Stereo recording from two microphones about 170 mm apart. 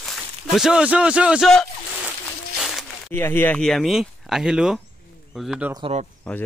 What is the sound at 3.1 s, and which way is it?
Speech, 10° left (ahead or behind).